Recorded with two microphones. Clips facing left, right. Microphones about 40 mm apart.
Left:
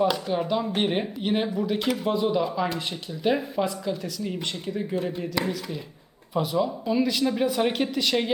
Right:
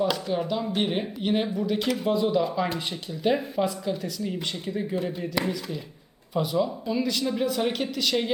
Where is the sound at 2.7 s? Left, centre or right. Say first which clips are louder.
Even; centre.